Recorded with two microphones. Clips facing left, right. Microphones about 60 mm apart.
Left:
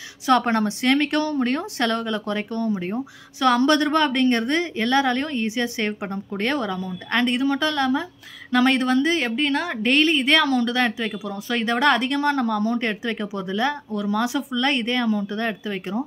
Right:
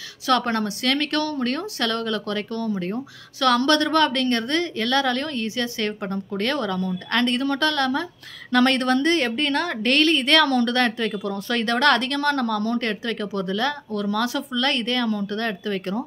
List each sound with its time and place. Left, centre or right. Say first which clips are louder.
0.3 s a woman's voice: left 2 dB; left